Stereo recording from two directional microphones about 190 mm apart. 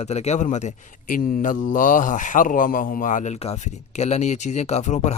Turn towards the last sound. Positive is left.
turn(degrees=35)  # may be behind; listen again after turning